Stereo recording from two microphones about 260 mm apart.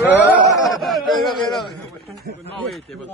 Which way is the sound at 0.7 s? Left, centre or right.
Centre.